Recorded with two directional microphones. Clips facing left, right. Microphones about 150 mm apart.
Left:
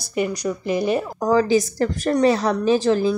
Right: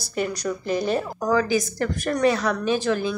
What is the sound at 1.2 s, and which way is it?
A woman's voice, 30° left (ahead or behind).